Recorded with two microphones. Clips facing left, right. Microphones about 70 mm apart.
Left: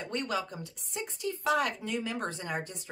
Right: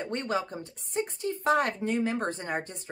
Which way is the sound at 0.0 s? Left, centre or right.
Right.